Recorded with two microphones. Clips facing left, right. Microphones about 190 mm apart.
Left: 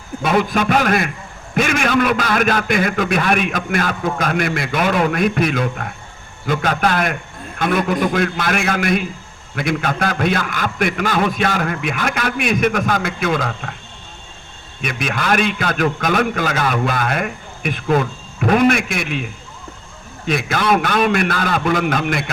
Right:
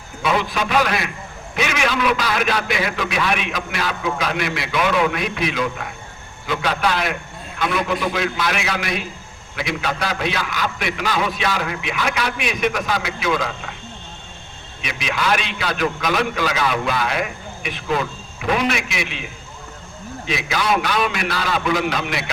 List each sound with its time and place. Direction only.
0.2 s a man's voice: 50° left (ahead or behind)
14.8 s a man's voice: 50° left (ahead or behind)